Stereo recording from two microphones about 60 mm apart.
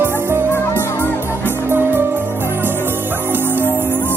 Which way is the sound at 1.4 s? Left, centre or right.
Right.